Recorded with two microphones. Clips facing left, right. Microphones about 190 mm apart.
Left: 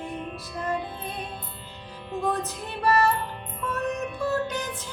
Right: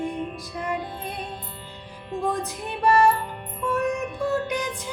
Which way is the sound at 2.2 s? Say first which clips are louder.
Right 1 dB; 15° right (ahead or behind).